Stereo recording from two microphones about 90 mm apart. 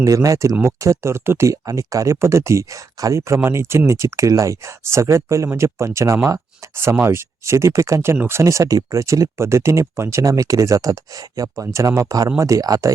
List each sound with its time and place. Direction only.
0.0 s speech: 35° right (ahead or behind)